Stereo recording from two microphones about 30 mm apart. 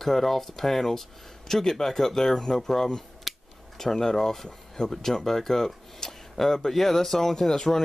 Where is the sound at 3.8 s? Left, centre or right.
Centre.